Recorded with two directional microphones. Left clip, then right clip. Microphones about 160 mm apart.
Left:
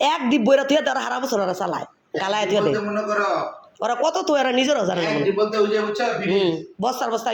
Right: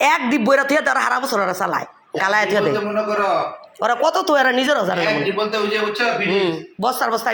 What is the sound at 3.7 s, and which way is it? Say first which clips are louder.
Speech: right 4 dB; 5° left (ahead or behind).